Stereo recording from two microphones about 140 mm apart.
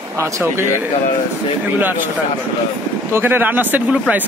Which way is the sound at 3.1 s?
15° right (ahead or behind).